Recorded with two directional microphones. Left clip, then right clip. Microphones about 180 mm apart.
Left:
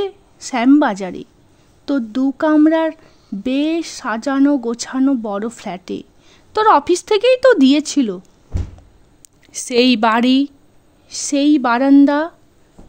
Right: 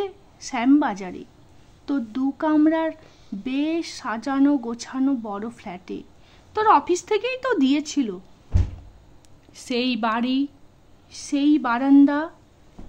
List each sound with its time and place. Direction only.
0.0 s a woman's voice: 35° left (ahead or behind)
9.5 s speech: 35° left (ahead or behind)